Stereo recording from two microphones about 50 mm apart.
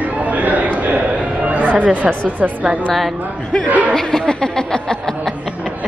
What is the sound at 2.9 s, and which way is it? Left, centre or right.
Speech, centre.